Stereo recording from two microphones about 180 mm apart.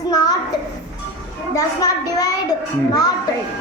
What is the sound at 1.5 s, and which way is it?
A child's voice, 20° left (ahead or behind).